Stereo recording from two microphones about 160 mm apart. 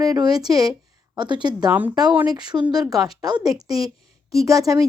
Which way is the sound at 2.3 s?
25° right (ahead or behind).